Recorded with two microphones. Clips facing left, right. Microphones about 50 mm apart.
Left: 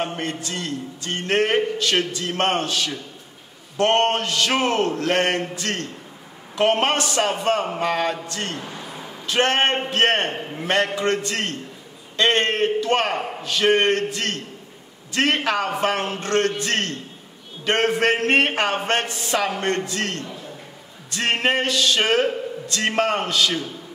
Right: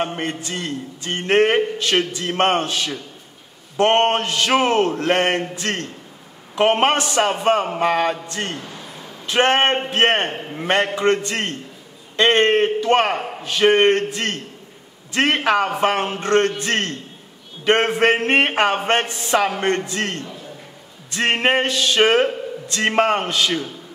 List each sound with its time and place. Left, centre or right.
0.0 s a man's voice: centre
8.5 s a sound: centre
9.2 s a man's voice: right
17.6 s a man's voice: right